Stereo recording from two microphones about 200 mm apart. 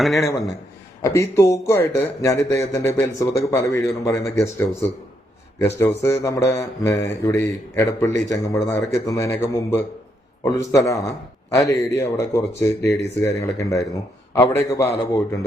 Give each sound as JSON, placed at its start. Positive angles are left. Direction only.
{"t": 0.0, "sound": "a man's voice", "side_deg": 0}
{"t": 1.0, "sound": "speech", "side_deg": 15}